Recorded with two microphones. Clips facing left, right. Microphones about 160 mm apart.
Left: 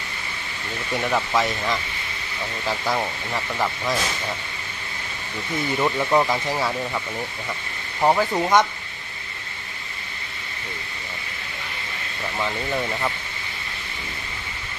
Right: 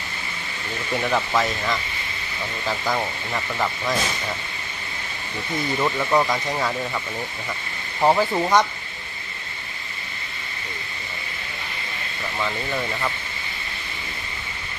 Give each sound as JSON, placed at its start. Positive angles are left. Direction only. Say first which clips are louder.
{"t": 0.9, "sound": "speech", "louder": "even", "side_deg": 0}
{"t": 5.8, "sound": "speech", "louder": "left 1 dB", "side_deg": 10}
{"t": 8.0, "sound": "speech", "louder": "right 1 dB", "side_deg": -5}
{"t": 12.4, "sound": "speech", "louder": "left 1 dB", "side_deg": 15}